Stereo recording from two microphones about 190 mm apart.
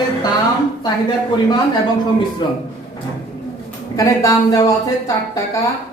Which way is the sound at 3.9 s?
20° left (ahead or behind).